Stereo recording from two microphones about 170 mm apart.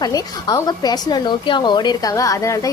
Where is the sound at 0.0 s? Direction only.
20° left (ahead or behind).